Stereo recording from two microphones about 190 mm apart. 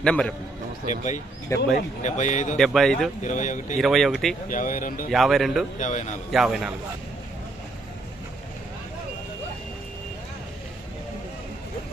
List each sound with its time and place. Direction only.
0.0 s speech: 5° left (ahead or behind)
0.9 s a man's voice: 40° left (ahead or behind)
1.5 s speech: 15° left (ahead or behind)
2.0 s a man's voice: 40° left (ahead or behind)
2.6 s speech: centre (ahead or behind)
3.2 s a man's voice: 40° left (ahead or behind)
3.8 s speech: centre (ahead or behind)
4.4 s speech: 45° left (ahead or behind)
5.1 s speech: centre (ahead or behind)
5.8 s a man's voice: 40° left (ahead or behind)
6.3 s speech: centre (ahead or behind)